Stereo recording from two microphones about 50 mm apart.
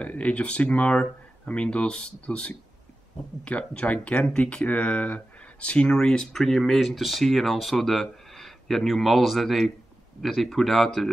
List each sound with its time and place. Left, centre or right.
0.0 s speech: left
4.3 s speech: centre